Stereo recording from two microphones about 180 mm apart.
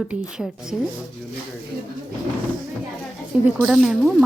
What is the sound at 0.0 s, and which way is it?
Speech, 5° right (ahead or behind).